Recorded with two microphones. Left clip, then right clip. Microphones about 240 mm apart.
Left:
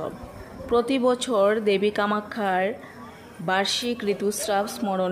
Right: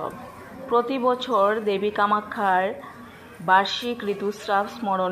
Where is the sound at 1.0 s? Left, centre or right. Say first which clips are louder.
Even; left.